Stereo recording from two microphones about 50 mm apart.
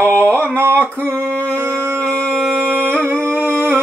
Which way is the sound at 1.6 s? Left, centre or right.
Right.